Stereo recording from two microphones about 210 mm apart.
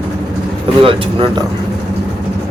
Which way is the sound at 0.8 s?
25° right (ahead or behind).